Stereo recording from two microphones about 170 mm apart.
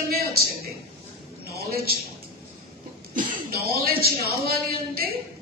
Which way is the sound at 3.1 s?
60° right (ahead or behind).